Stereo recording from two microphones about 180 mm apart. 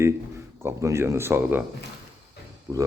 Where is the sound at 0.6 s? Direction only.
15° right (ahead or behind).